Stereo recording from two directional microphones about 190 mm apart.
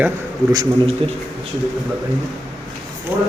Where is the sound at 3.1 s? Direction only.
10° right (ahead or behind).